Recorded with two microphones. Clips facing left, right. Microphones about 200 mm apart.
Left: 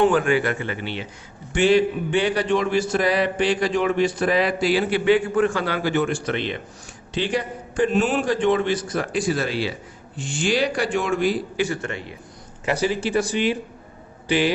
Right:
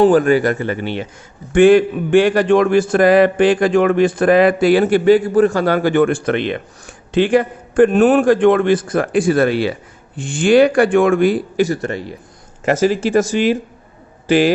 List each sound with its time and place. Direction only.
0.0 s a man's voice: 40° right (ahead or behind)
11.6 s a man's voice: 40° right (ahead or behind)